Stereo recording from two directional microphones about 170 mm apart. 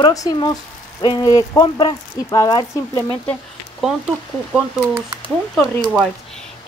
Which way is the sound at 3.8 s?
Centre (ahead or behind).